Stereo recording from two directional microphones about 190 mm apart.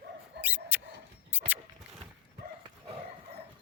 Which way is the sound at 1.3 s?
10° right (ahead or behind).